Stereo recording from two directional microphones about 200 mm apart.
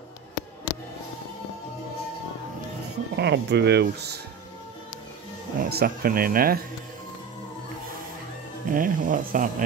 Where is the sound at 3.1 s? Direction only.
55° right (ahead or behind).